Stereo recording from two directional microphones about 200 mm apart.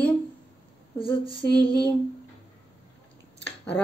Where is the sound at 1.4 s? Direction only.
50° left (ahead or behind).